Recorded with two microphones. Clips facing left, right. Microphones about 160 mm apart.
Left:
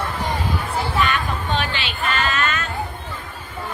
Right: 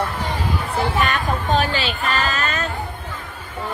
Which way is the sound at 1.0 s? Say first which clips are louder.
Right 2 dB; 40° right (ahead or behind).